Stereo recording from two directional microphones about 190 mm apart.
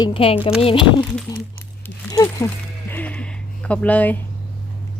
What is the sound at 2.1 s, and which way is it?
Speech, 20° left (ahead or behind).